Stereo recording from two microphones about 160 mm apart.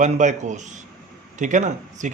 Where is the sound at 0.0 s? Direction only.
50° right (ahead or behind).